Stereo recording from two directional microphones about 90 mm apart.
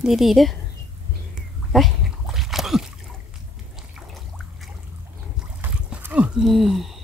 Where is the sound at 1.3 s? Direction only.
Centre (ahead or behind).